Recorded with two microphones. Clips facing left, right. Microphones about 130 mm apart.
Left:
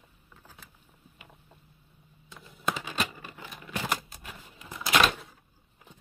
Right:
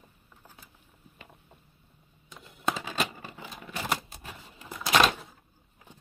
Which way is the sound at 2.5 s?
20° right (ahead or behind).